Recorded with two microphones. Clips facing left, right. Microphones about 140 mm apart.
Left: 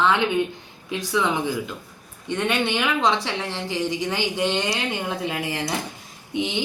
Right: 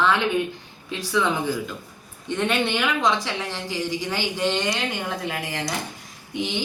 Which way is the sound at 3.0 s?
30° left (ahead or behind).